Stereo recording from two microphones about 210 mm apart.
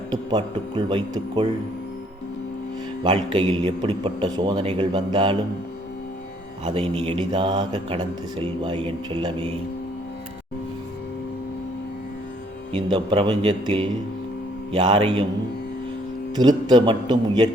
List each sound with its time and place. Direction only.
0.1 s speech: 20° right (ahead or behind)
3.0 s speech: 20° right (ahead or behind)
6.7 s speech: 25° right (ahead or behind)
12.7 s speech: 25° right (ahead or behind)
16.3 s speech: 20° right (ahead or behind)